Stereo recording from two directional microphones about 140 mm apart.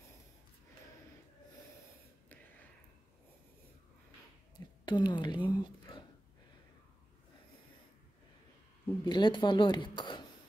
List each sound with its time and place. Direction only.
4.8 s speech: 35° left (ahead or behind)
9.0 s speech: 35° left (ahead or behind)